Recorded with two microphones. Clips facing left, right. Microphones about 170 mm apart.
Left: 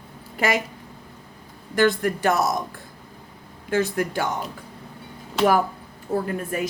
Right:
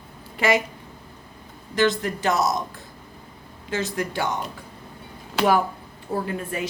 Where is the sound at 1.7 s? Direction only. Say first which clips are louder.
Left 2 dB; 55° left (ahead or behind).